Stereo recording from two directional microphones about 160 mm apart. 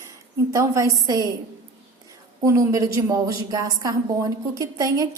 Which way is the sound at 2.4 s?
20° right (ahead or behind).